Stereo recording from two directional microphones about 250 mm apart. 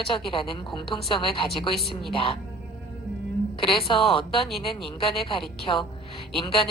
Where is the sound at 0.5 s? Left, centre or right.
Centre.